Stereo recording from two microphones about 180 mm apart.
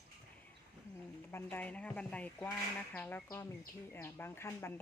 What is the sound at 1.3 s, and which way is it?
Speech, 10° left (ahead or behind).